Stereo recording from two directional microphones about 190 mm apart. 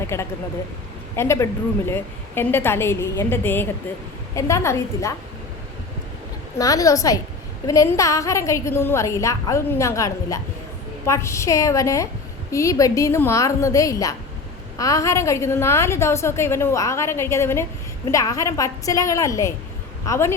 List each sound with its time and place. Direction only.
0.1 s a woman's voice: 15° left (ahead or behind)
6.6 s a woman's voice: 20° left (ahead or behind)